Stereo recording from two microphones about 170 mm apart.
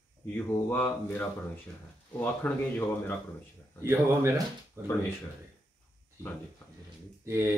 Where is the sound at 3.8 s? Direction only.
15° right (ahead or behind).